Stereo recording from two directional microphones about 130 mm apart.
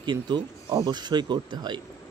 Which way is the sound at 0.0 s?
35° right (ahead or behind).